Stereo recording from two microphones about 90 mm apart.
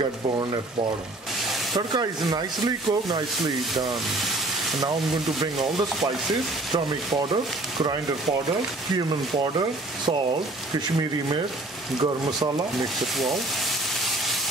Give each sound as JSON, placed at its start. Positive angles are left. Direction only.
{"t": 1.8, "sound": "speech", "side_deg": -50}
{"t": 12.0, "sound": "speech", "side_deg": -50}
{"t": 13.0, "sound": "speech", "side_deg": 0}